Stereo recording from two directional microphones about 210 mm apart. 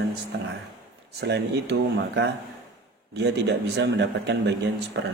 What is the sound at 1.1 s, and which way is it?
A man's voice, 50° right (ahead or behind).